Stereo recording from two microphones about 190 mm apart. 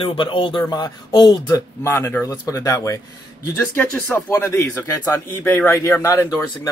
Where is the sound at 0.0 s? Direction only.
25° left (ahead or behind).